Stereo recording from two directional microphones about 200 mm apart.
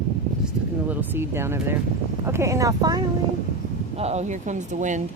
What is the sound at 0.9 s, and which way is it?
Speech, 10° right (ahead or behind).